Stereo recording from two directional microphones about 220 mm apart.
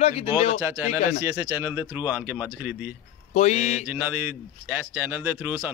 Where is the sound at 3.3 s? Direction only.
30° left (ahead or behind).